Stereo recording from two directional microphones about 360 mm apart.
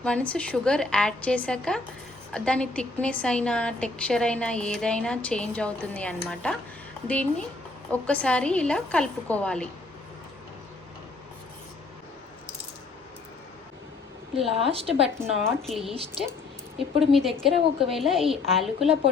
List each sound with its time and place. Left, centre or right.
0.0 s a woman's voice: centre
14.4 s a woman's voice: centre
15.0 s a woman's voice: centre